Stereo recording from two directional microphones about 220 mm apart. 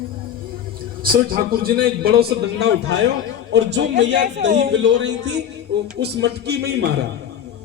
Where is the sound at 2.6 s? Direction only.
55° right (ahead or behind).